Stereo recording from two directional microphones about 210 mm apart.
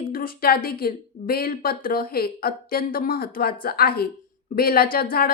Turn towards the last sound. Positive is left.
turn(degrees=45)  # may be behind; listen again after turning